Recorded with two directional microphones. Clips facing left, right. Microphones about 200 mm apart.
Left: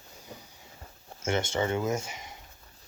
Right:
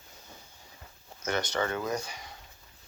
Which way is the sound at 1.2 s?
25° left (ahead or behind).